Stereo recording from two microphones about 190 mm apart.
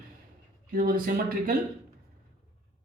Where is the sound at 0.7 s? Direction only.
50° right (ahead or behind).